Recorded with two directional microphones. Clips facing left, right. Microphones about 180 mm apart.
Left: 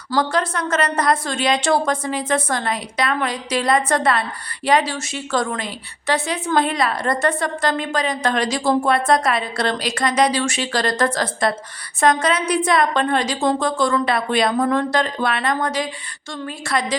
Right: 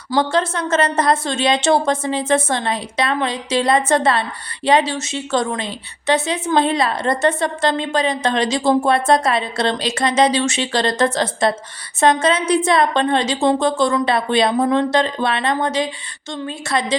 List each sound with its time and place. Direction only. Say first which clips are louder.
0.2 s a woman's voice: right 2 dB; 25° right (ahead or behind)